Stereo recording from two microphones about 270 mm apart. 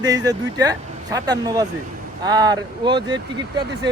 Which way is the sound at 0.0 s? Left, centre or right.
Centre.